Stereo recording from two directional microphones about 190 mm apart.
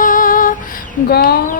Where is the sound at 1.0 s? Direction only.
55° left (ahead or behind).